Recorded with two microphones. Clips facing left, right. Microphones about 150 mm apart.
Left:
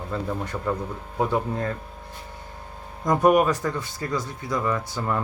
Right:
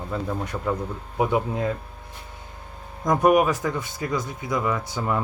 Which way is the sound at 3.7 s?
20° right (ahead or behind).